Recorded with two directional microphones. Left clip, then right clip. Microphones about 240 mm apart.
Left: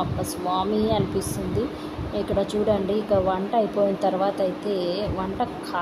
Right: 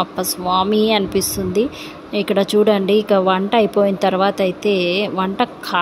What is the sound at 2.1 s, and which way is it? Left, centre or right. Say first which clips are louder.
Speech: right 9 dB; right.